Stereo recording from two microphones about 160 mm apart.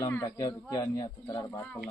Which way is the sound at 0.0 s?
20° left (ahead or behind).